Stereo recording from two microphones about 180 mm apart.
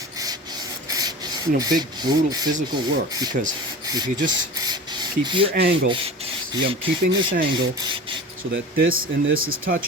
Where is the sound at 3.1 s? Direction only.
20° right (ahead or behind).